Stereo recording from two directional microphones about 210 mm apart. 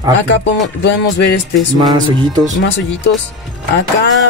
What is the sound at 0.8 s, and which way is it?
Music, 55° left (ahead or behind).